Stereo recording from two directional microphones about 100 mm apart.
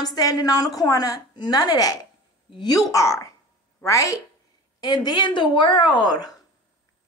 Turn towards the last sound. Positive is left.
turn(degrees=45)  # may be behind; listen again after turning